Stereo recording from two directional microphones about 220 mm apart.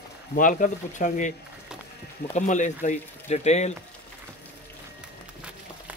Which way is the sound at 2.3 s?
35° left (ahead or behind).